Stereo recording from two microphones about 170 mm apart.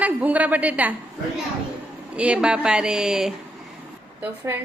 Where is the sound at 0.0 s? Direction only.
10° right (ahead or behind).